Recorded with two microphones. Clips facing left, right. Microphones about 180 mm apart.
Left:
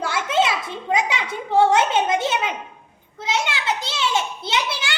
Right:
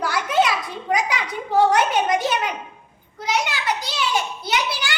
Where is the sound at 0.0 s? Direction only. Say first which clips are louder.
Right 1 dB; 25° left (ahead or behind).